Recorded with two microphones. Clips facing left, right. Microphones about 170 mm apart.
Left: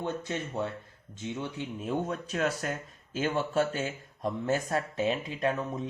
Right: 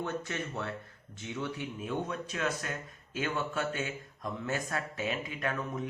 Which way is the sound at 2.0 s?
35° left (ahead or behind).